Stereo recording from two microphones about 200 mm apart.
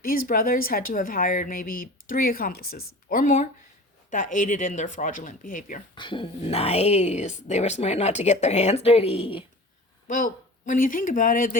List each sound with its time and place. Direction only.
0.0 s speech: 45° left (ahead or behind)
5.9 s speech: 25° left (ahead or behind)
10.1 s speech: 40° left (ahead or behind)